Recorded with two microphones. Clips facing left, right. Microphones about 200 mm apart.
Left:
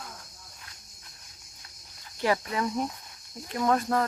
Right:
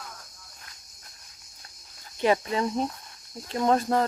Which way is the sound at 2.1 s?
20° right (ahead or behind).